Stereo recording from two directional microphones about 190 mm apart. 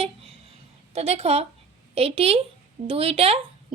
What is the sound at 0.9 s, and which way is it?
Speech, 35° right (ahead or behind).